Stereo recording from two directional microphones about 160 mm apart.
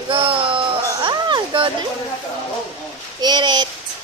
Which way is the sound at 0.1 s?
35° right (ahead or behind).